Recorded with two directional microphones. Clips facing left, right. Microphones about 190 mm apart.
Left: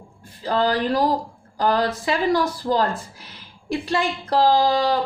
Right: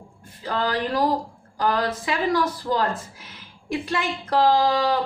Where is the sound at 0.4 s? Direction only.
35° left (ahead or behind).